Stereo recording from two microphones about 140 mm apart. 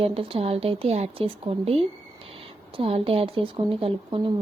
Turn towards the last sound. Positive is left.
turn(degrees=-40)  # may be behind; listen again after turning